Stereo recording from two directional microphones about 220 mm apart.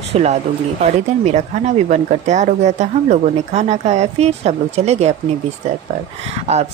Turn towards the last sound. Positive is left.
turn(degrees=-30)  # may be behind; listen again after turning